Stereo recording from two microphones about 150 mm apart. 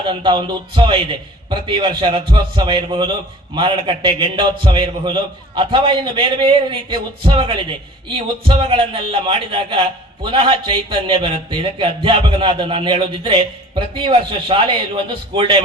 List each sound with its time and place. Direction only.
0.0 s a man's voice: 30° right (ahead or behind)